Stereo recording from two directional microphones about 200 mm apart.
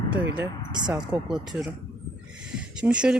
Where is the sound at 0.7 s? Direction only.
20° right (ahead or behind).